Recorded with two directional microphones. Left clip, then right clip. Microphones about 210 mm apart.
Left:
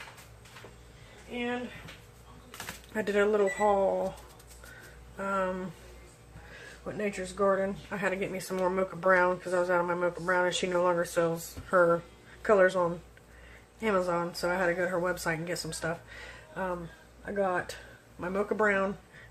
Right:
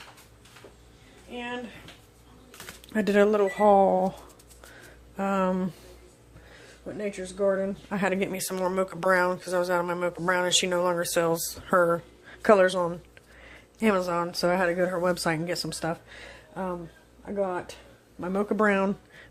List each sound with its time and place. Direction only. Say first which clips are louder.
2.9 s speech: right 5 dB; 45° right (ahead or behind)
5.1 s speech: right 4 dB; 40° right (ahead or behind)
6.8 s speech: right 1 dB; 10° right (ahead or behind)
7.9 s speech: right 4 dB; 45° right (ahead or behind)
17.3 s speech: right 1 dB; 5° right (ahead or behind)
18.2 s speech: right 2 dB; 25° right (ahead or behind)
18.4 s speech: right 3 dB; 40° right (ahead or behind)